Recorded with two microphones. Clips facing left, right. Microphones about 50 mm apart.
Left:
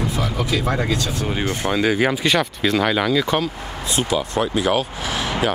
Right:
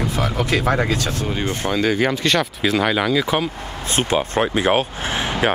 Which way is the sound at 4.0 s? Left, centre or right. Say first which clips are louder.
Right 2 dB; right.